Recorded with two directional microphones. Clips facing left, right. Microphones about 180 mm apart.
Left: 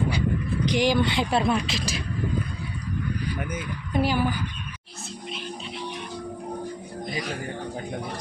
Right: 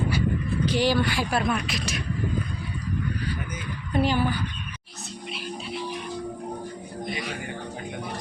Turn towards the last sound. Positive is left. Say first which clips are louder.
# left 2 dB
turn(degrees=0)  # may be behind; listen again after turning